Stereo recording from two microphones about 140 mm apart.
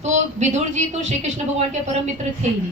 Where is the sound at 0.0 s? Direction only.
55° right (ahead or behind).